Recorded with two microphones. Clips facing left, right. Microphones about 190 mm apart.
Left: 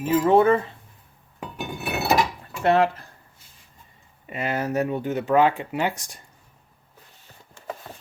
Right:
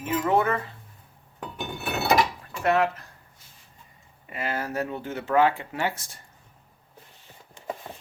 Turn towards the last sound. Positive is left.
turn(degrees=-15)  # may be behind; listen again after turning